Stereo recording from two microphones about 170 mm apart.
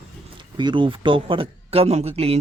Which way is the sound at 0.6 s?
25° right (ahead or behind).